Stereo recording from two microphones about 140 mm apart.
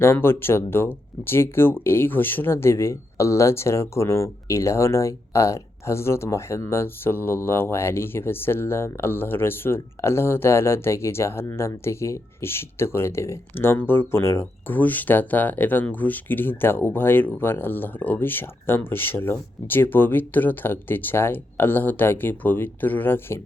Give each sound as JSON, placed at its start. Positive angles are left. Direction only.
{"t": 0.0, "sound": "speech", "side_deg": 15}